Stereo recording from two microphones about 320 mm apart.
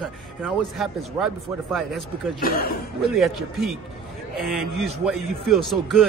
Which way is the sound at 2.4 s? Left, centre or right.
Left.